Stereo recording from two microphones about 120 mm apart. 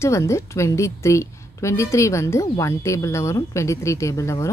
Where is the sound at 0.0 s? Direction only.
25° left (ahead or behind).